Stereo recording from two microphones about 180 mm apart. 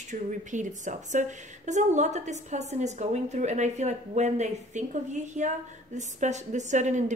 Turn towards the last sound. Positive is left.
turn(degrees=-40)  # may be behind; listen again after turning